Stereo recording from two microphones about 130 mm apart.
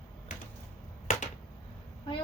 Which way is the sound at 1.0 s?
70° left (ahead or behind).